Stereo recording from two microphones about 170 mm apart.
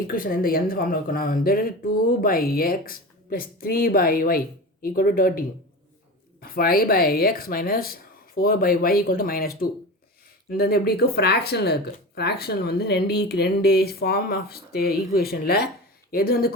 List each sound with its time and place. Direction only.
0.1 s speech: 55° left (ahead or behind)
10.6 s speech: 65° left (ahead or behind)